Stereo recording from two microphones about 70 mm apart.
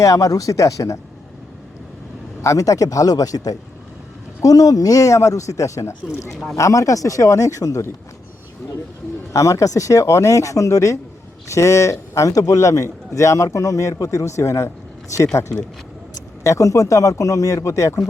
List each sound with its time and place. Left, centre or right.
0.0 s a man's voice: left
2.4 s a man's voice: left
9.3 s a man's voice: left